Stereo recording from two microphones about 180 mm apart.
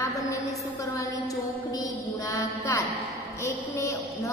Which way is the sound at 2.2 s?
15° left (ahead or behind).